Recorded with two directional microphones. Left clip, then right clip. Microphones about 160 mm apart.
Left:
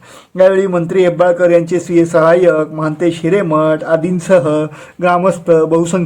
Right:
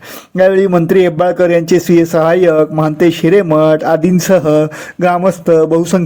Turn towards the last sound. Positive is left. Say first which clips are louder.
# right 1 dB
turn(degrees=-30)  # may be behind; listen again after turning